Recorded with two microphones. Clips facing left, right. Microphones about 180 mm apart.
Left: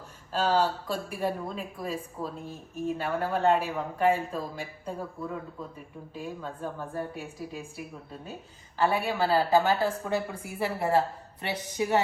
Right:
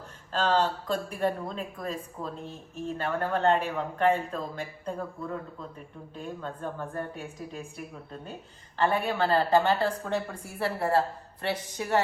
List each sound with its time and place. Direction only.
0.3 s a woman's voice: 10° left (ahead or behind)
10.6 s speech: 15° left (ahead or behind)